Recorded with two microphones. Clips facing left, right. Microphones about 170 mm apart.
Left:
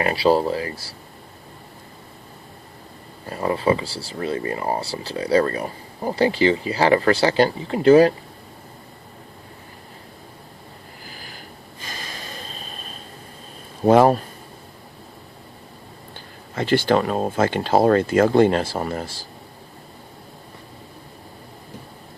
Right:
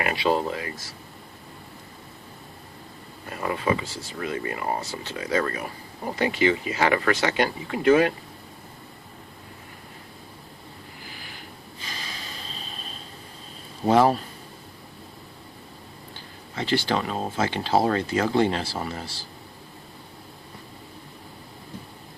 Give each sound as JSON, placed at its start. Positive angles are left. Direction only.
{"t": 0.0, "sound": "speech", "side_deg": 35}
{"t": 3.2, "sound": "speech", "side_deg": 30}
{"t": 11.0, "sound": "a sound", "side_deg": 40}
{"t": 11.8, "sound": "snort", "side_deg": 50}
{"t": 13.8, "sound": "speech", "side_deg": 50}
{"t": 16.6, "sound": "speech", "side_deg": 50}